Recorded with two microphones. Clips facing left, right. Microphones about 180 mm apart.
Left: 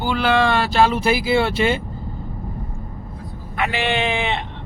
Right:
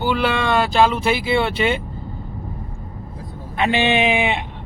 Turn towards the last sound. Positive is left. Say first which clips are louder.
# right 3 dB
turn(degrees=-15)  # may be behind; listen again after turning